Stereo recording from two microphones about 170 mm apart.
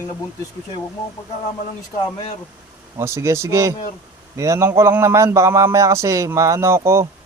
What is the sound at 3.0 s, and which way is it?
Speech, 15° right (ahead or behind).